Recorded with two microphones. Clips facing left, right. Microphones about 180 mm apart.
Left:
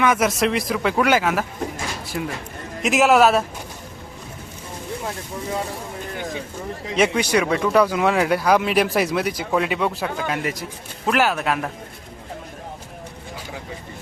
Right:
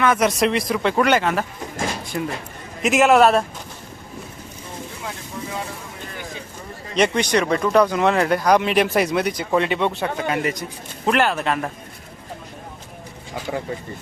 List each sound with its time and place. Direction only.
0.0 s speech: 5° left (ahead or behind)
6.9 s speech: 5° left (ahead or behind)
13.5 s speech: 65° right (ahead or behind)